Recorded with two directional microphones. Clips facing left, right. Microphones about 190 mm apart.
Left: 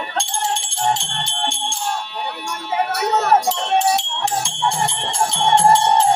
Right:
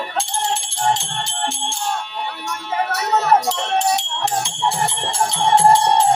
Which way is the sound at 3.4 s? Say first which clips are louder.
Left 2 dB; centre (ahead or behind).